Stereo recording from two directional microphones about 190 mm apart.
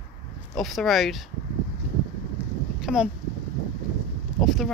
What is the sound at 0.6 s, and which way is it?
Speech, centre (ahead or behind).